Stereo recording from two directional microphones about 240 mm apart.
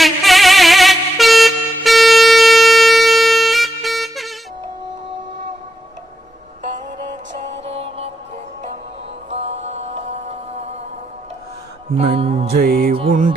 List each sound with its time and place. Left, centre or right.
0.0 s vehicle: centre
1.8 s music: centre
7.6 s music: right
9.3 s music: right
11.9 s music: right
12.5 s music: right
12.9 s music: right